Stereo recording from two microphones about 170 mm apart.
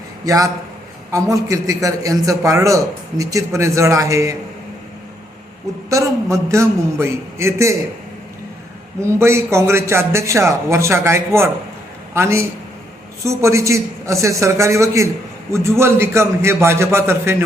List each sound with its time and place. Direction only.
0.3 s a man's voice: 20° right (ahead or behind)
5.9 s a man's voice: 20° right (ahead or behind)
9.0 s a man's voice: 15° right (ahead or behind)